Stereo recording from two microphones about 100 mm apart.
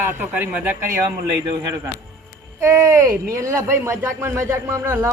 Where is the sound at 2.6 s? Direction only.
25° right (ahead or behind).